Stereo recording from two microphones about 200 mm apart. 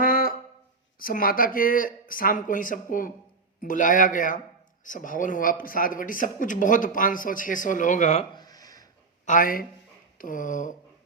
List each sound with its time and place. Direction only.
0.0 s brass instrument: 45° left (ahead or behind)
0.9 s a man's voice: 45° left (ahead or behind)
8.4 s a sound: 20° left (ahead or behind)
9.2 s a man's voice: 45° left (ahead or behind)